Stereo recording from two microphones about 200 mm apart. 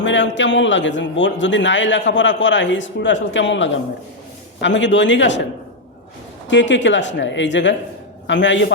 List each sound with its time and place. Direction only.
0.0 s a man's voice: 65° left (ahead or behind)
6.5 s a man's voice: 65° left (ahead or behind)